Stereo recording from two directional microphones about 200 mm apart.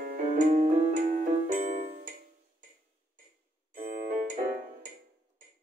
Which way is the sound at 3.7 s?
40° right (ahead or behind).